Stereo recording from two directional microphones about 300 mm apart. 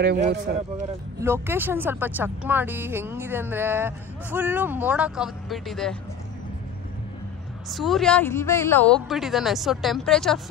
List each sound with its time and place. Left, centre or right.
0.0 s a man's voice: right
1.2 s speech: centre
7.7 s speech: centre